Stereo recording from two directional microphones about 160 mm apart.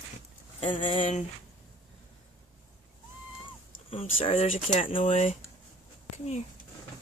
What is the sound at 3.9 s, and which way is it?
Speech, 35° left (ahead or behind).